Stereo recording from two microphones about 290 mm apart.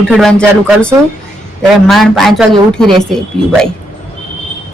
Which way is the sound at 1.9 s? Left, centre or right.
Centre.